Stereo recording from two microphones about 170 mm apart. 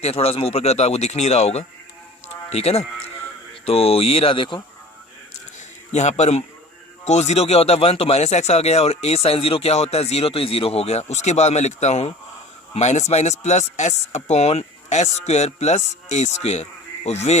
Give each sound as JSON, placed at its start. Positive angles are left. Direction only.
{"t": 0.0, "sound": "speech", "side_deg": 35}
{"t": 5.9, "sound": "speech", "side_deg": 40}